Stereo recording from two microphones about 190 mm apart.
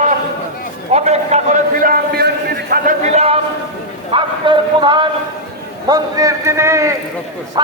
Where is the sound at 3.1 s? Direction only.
35° right (ahead or behind).